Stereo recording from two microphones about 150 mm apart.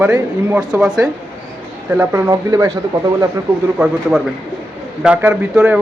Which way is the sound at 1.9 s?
20° right (ahead or behind).